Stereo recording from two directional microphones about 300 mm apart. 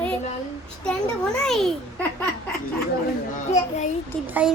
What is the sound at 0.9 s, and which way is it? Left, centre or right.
Speech, centre.